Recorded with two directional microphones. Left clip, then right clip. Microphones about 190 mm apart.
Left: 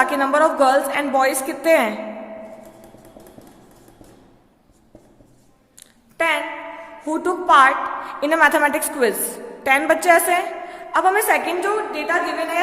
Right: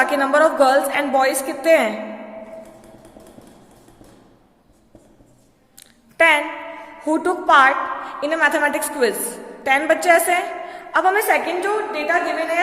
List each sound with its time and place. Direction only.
0.0 s a woman's voice: 10° left (ahead or behind)
6.1 s a woman's voice: 15° right (ahead or behind)
8.0 s a woman's voice: 25° left (ahead or behind)